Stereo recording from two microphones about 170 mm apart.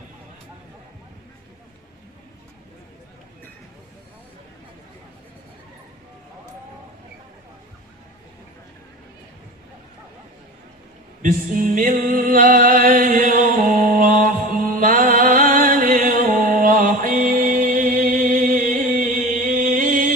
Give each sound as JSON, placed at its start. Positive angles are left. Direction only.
{"t": 11.2, "sound": "music", "side_deg": -50}